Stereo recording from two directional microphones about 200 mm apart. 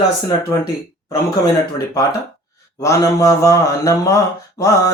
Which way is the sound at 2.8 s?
15° left (ahead or behind).